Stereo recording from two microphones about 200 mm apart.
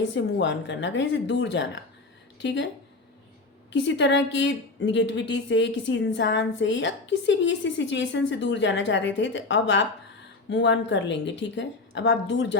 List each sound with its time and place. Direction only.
0.1 s a woman's voice: 65° left (ahead or behind)
3.7 s a woman's voice: 65° left (ahead or behind)